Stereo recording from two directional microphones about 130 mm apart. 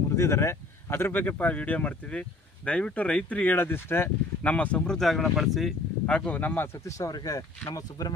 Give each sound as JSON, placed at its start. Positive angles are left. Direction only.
{"t": 0.2, "sound": "speech", "side_deg": 20}
{"t": 6.7, "sound": "speech", "side_deg": 25}